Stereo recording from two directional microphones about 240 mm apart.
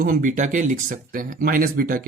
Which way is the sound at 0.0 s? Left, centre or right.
Right.